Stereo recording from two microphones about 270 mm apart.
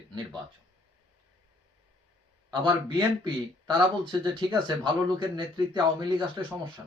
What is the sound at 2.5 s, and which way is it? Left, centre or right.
Speech, centre.